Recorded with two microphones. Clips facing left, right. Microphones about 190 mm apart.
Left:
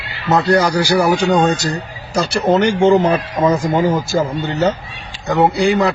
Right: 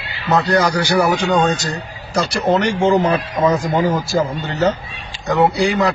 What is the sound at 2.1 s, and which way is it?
A man's voice, centre (ahead or behind).